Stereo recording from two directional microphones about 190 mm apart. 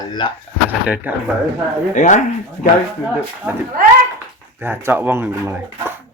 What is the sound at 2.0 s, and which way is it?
Speech, 40° left (ahead or behind).